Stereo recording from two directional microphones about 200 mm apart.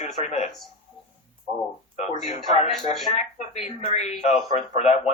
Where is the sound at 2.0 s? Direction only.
35° left (ahead or behind).